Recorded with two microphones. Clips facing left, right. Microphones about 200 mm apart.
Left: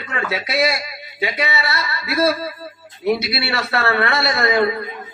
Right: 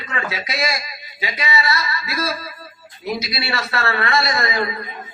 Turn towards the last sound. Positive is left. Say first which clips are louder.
# left 5 dB
turn(degrees=60)  # may be behind; listen again after turning